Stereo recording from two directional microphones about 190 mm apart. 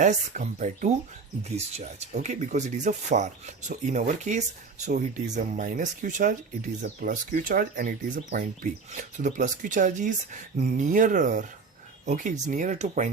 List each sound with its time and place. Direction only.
0.0 s speech: 40° right (ahead or behind)